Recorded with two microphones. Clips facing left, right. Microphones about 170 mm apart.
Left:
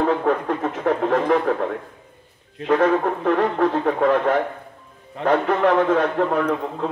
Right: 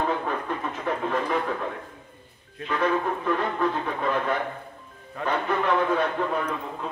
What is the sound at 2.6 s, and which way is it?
Speech, 80° left.